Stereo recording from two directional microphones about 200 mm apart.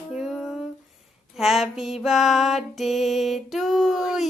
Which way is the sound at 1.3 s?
Centre (ahead or behind).